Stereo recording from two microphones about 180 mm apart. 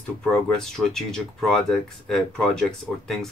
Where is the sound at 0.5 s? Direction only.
Centre (ahead or behind).